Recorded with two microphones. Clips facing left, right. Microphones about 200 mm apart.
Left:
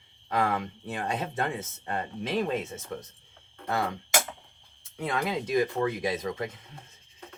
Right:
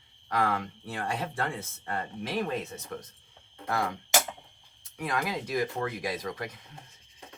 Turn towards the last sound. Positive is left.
turn(degrees=25)  # may be behind; listen again after turning